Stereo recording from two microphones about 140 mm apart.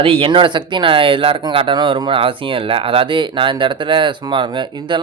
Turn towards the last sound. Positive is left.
turn(degrees=-35)  # may be behind; listen again after turning